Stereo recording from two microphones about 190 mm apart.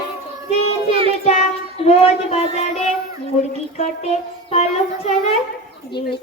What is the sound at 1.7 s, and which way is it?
Speech, 30° left (ahead or behind).